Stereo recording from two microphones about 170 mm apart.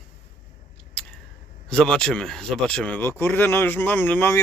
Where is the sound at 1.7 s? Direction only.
5° left (ahead or behind).